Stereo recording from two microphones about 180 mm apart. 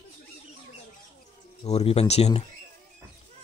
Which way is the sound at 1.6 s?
35° left (ahead or behind).